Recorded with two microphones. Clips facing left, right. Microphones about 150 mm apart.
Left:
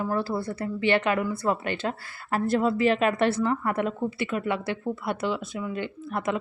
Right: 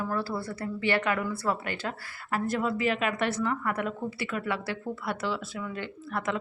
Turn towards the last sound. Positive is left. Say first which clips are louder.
# left 3 dB
turn(degrees=20)  # may be behind; listen again after turning